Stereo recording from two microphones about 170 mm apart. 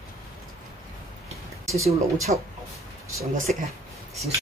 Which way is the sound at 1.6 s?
20° right (ahead or behind).